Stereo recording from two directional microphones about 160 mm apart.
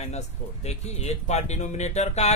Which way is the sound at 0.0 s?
45° left (ahead or behind).